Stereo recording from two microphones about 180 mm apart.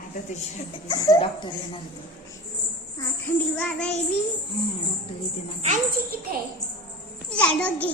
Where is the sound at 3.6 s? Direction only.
5° left (ahead or behind).